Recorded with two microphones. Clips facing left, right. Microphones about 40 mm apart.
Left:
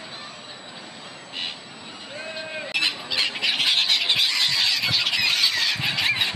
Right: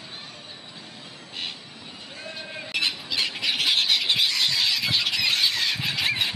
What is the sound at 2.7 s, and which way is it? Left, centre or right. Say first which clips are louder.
Squawk: left 2 dB; centre.